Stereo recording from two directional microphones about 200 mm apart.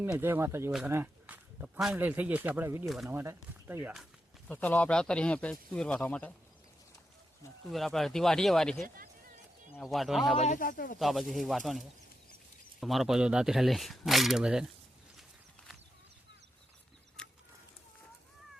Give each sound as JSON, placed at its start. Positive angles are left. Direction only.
{"t": 0.0, "sound": "speech", "side_deg": -10}
{"t": 2.8, "sound": "speech", "side_deg": 0}
{"t": 3.1, "sound": "speech", "side_deg": -10}
{"t": 4.4, "sound": "speech", "side_deg": 10}
{"t": 7.7, "sound": "speech", "side_deg": 0}
{"t": 10.3, "sound": "speech", "side_deg": 35}
{"t": 11.0, "sound": "speech", "side_deg": 0}
{"t": 17.2, "sound": "a sound", "side_deg": 5}